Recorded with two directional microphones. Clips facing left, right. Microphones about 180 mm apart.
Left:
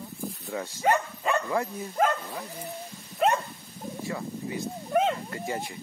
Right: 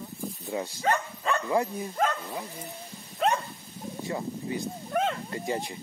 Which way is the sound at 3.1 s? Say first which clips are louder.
Left 2 dB; centre (ahead or behind).